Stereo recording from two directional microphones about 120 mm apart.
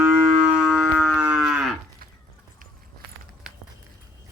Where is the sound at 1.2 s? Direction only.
10° right (ahead or behind).